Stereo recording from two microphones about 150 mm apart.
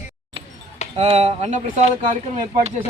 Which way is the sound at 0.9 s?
45° right (ahead or behind).